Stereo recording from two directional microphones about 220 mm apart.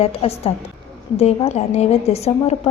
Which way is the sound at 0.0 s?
25° left (ahead or behind).